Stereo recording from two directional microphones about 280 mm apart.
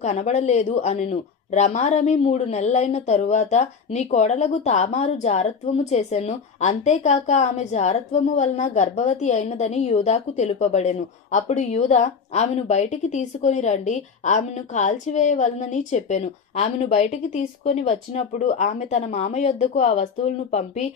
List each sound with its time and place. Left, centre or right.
0.0 s speech: left